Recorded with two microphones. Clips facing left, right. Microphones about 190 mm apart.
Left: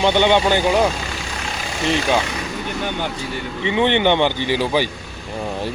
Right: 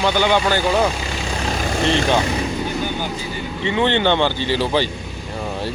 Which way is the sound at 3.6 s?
15° left (ahead or behind).